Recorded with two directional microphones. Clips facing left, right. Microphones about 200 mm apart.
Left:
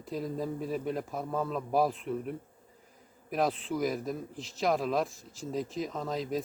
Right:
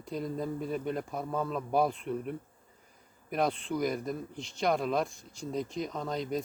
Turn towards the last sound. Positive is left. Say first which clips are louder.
# even
turn(degrees=0)  # may be behind; listen again after turning